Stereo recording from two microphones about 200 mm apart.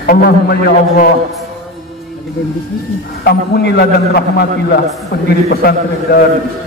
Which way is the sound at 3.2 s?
55° left (ahead or behind).